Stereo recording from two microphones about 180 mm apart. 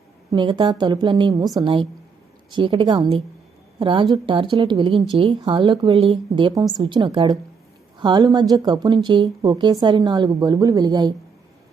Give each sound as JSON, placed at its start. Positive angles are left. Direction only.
{"t": 0.3, "sound": "a woman's voice", "side_deg": -25}